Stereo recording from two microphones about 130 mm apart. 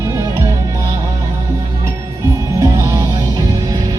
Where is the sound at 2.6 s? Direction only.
25° right (ahead or behind).